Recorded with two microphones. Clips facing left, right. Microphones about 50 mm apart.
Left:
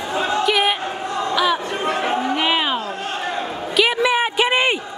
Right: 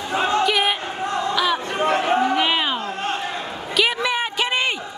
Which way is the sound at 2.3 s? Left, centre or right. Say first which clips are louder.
Left 1 dB; centre.